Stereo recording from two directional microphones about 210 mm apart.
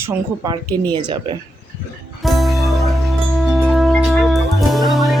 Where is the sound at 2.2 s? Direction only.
Centre (ahead or behind).